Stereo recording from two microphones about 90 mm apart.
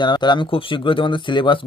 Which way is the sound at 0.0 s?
55° left (ahead or behind).